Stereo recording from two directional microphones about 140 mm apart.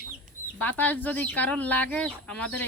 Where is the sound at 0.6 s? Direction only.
10° left (ahead or behind).